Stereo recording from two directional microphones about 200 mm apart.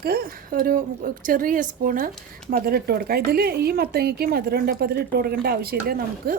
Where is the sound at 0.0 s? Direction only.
50° right (ahead or behind).